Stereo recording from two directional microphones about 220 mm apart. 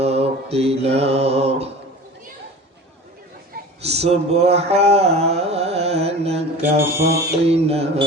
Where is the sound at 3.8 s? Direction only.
30° right (ahead or behind).